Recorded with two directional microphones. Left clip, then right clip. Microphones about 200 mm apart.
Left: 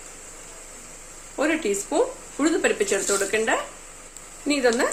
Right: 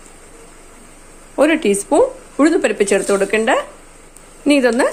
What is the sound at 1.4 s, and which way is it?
A woman's voice, 45° right (ahead or behind).